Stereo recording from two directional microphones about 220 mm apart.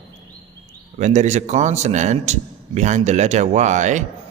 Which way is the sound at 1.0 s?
30° right (ahead or behind).